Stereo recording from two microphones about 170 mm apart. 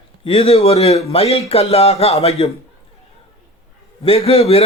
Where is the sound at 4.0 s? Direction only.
35° left (ahead or behind).